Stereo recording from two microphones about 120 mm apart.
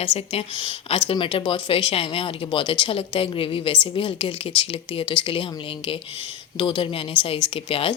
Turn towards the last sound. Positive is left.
turn(degrees=50)  # may be behind; listen again after turning